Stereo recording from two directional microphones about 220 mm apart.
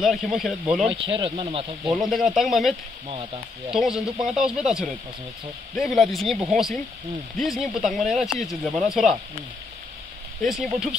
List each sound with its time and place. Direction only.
0.0 s speech: centre (ahead or behind)
0.8 s speech: 25° right (ahead or behind)
1.9 s speech: centre (ahead or behind)
3.7 s speech: centre (ahead or behind)
10.4 s speech: centre (ahead or behind)